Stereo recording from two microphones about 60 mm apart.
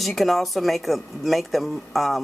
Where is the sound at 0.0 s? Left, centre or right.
Centre.